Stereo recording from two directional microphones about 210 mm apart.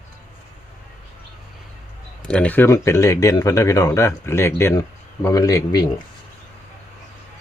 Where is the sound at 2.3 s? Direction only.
5° left (ahead or behind).